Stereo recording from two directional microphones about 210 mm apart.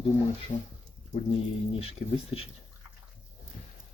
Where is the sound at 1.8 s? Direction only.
30° left (ahead or behind).